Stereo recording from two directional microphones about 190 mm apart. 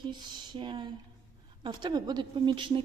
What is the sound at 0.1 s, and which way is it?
A woman's voice, 25° right (ahead or behind).